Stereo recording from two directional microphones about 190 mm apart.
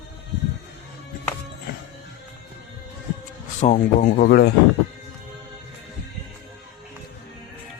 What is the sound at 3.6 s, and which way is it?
Speech, 40° left (ahead or behind).